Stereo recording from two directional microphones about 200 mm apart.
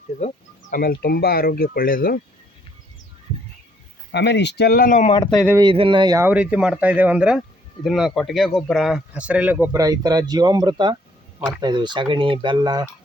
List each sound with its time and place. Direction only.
0.2 s speech: 35° left (ahead or behind)
0.8 s speech: 50° left (ahead or behind)
4.1 s speech: 60° left (ahead or behind); by 5.1 s 40° left (ahead or behind)
5.3 s speech: centre (ahead or behind)
5.5 s speech: 25° right (ahead or behind)